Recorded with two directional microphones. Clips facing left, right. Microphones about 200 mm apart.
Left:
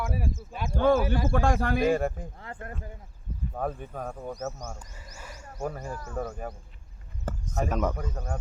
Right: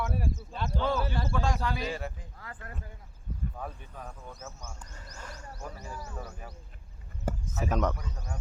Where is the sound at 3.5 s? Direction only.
50° left (ahead or behind).